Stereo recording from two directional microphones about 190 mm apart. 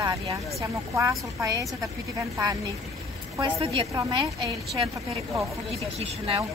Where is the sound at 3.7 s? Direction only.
25° right (ahead or behind).